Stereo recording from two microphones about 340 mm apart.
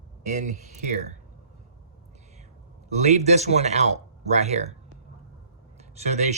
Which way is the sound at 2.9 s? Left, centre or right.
Centre.